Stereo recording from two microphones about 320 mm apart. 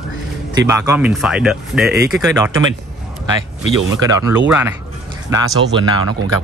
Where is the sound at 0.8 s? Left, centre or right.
Centre.